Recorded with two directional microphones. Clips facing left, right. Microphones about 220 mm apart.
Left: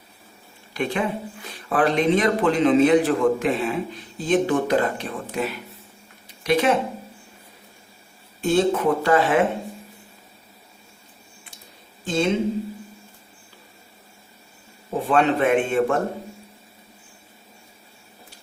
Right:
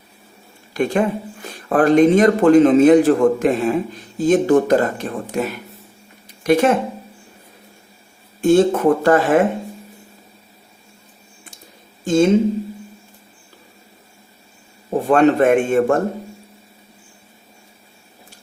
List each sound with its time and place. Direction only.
0.7 s speech: 45° right (ahead or behind)
8.4 s speech: 50° right (ahead or behind)
12.0 s speech: 45° right (ahead or behind)
15.0 s speech: 45° right (ahead or behind)